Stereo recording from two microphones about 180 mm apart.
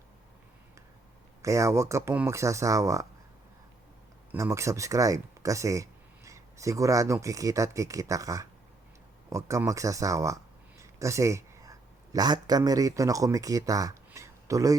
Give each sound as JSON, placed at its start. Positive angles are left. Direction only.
{"t": 1.4, "sound": "speech", "side_deg": -15}
{"t": 4.3, "sound": "speech", "side_deg": -15}